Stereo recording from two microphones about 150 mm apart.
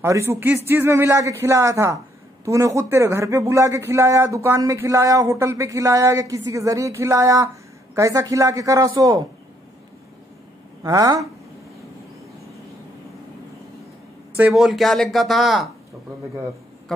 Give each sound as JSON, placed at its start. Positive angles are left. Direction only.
{"t": 0.0, "sound": "a man's voice", "side_deg": -20}
{"t": 10.8, "sound": "a man's voice", "side_deg": -25}
{"t": 14.3, "sound": "speech", "side_deg": -5}